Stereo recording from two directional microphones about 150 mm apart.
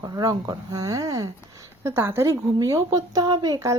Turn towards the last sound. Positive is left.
turn(degrees=-25)  # may be behind; listen again after turning